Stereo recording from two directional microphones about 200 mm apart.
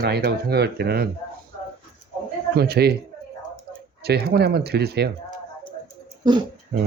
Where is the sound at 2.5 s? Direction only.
50° right (ahead or behind).